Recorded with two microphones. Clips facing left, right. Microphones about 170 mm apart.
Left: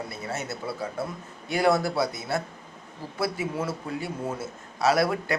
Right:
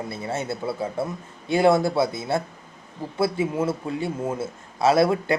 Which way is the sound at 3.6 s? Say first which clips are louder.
Right 5 dB; 25° right (ahead or behind).